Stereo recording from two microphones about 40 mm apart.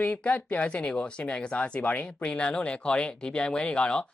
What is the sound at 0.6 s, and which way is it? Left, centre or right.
Speech, left.